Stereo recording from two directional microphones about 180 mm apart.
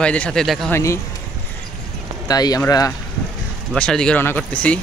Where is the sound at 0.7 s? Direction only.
15° left (ahead or behind).